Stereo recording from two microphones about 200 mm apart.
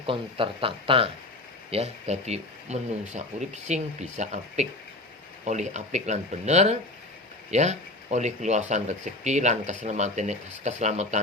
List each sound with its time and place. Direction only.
0.0 s speech: 25° right (ahead or behind)